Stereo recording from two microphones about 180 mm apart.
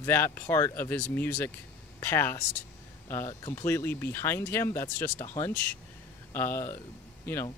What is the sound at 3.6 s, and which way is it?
Speech, 15° left (ahead or behind).